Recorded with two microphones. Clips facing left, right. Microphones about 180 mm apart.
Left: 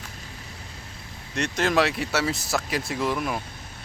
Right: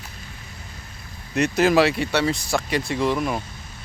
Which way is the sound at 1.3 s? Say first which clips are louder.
Right 6 dB; 5° right (ahead or behind).